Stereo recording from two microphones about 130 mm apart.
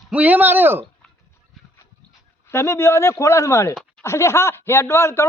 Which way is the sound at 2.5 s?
20° left (ahead or behind).